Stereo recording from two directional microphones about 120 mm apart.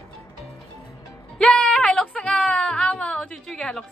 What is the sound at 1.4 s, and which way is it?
Speech, 5° left (ahead or behind).